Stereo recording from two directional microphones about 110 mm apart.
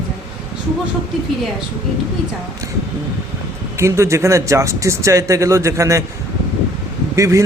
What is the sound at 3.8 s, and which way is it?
A man's voice, 25° right (ahead or behind).